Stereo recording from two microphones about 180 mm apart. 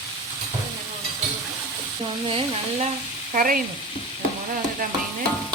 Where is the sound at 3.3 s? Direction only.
50° right (ahead or behind).